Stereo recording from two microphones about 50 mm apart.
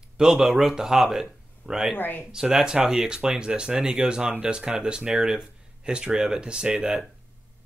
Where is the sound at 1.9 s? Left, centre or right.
Left.